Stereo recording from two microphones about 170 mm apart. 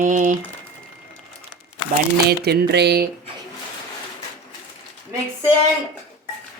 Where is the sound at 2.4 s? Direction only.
75° right (ahead or behind).